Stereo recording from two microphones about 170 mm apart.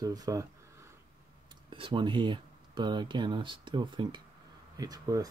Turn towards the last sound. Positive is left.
turn(degrees=-20)  # may be behind; listen again after turning